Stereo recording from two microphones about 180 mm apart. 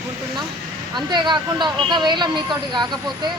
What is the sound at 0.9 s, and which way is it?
Speech, 25° right (ahead or behind).